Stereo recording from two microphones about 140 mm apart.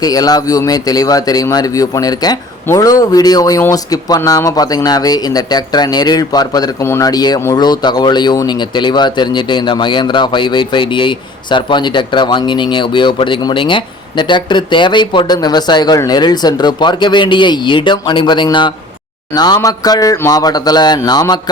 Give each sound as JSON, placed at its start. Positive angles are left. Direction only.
{"t": 0.0, "sound": "speech", "side_deg": 25}